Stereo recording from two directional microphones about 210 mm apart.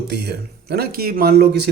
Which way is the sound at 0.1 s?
50° right (ahead or behind).